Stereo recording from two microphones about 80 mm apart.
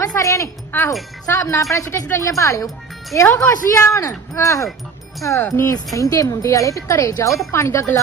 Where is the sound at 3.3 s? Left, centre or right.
Left.